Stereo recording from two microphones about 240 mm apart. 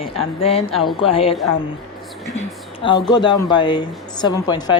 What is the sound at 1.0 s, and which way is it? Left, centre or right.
Speech, left.